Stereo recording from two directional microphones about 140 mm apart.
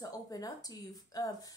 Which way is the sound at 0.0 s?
25° left (ahead or behind).